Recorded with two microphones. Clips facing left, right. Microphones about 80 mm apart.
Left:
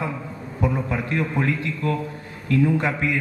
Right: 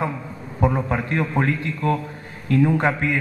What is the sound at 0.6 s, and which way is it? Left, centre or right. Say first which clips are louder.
Speech: right 3 dB; right.